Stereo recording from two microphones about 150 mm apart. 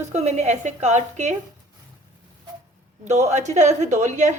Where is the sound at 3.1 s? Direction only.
50° right (ahead or behind).